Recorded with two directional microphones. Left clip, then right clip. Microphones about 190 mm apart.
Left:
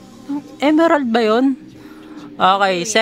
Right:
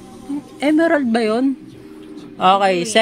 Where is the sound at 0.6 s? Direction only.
25° left (ahead or behind).